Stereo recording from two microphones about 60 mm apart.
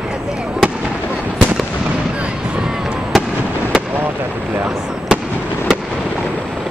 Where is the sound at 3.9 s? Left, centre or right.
Right.